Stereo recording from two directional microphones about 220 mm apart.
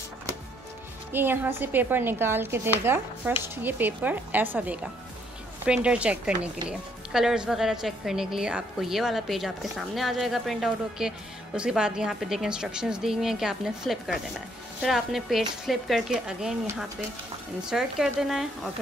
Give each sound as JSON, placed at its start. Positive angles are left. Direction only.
{"t": 1.1, "sound": "a woman's voice", "side_deg": -10}